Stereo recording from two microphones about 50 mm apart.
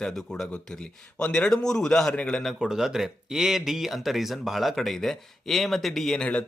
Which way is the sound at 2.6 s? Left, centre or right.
Centre.